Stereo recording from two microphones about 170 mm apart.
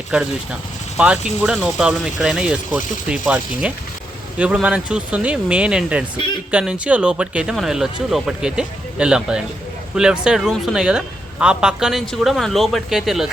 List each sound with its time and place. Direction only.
0.1 s a man's voice: 5° right (ahead or behind)